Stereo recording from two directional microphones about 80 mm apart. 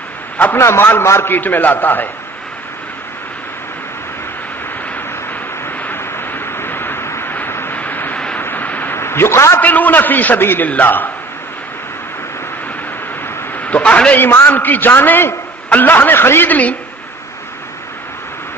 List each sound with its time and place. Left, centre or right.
0.6 s a man's voice: left
5.9 s vehicle: left
8.4 s a sound: left
9.6 s a man's voice: left
13.6 s a man's voice: centre